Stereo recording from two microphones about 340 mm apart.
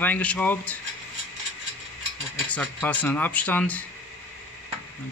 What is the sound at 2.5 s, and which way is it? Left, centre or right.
A man's voice, centre.